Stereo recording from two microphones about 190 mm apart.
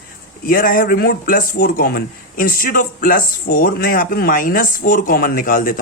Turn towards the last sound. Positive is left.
turn(degrees=45)  # may be behind; listen again after turning